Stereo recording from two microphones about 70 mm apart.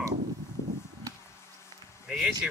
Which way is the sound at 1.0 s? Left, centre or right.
Left.